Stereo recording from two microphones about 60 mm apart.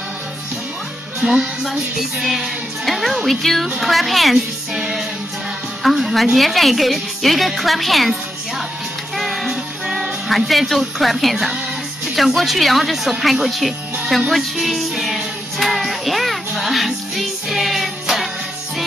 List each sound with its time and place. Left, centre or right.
1.2 s music: centre
4.7 s music: centre
9.2 s music: centre